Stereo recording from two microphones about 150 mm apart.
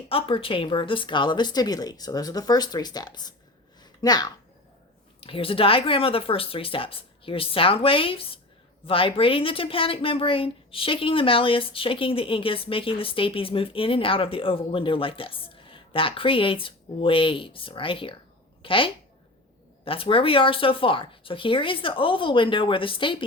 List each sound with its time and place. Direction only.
0.1 s speech: 40° left (ahead or behind)
5.2 s speech: 35° left (ahead or behind)